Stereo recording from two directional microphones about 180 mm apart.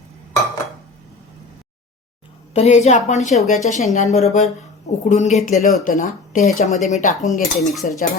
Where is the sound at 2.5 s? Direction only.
35° left (ahead or behind).